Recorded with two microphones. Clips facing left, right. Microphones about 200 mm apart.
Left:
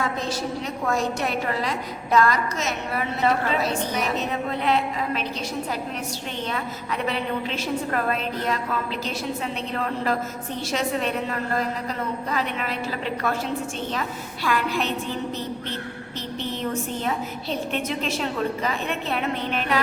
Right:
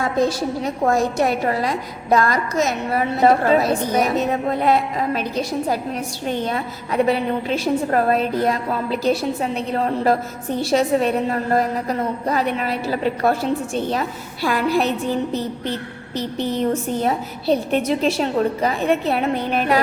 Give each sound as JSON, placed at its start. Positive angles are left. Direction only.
{"t": 0.9, "sound": "a woman's voice", "side_deg": -45}
{"t": 17.0, "sound": "a woman's voice", "side_deg": -40}